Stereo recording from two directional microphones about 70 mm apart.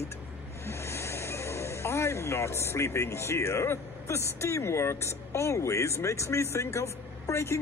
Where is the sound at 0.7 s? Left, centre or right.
Left.